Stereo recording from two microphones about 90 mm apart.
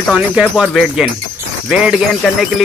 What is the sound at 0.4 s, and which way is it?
Speech, 5° right (ahead or behind).